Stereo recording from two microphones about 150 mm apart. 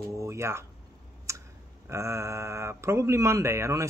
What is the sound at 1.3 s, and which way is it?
Clicking, 20° right (ahead or behind).